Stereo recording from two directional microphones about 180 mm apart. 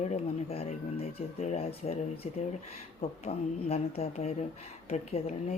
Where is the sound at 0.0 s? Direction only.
35° left (ahead or behind).